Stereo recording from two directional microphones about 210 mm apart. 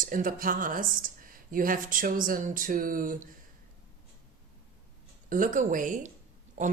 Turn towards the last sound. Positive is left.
turn(degrees=-35)  # may be behind; listen again after turning